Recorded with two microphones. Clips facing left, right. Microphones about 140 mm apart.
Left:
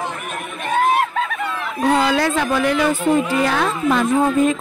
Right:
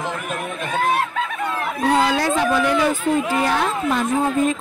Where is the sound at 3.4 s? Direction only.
90° left.